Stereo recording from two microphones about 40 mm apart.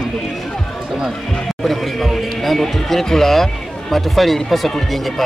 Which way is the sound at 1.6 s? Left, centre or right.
Centre.